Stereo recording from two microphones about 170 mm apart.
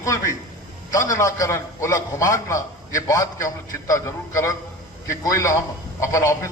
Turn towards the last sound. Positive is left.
turn(degrees=20)  # may be behind; listen again after turning